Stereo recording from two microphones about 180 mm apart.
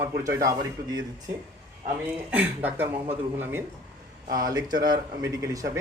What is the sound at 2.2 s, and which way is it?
Speech, 10° right (ahead or behind).